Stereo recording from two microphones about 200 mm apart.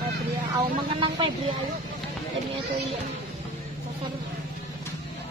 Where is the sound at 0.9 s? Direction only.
25° right (ahead or behind).